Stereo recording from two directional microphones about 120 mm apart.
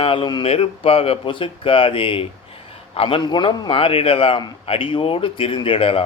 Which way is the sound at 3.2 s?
40° left (ahead or behind).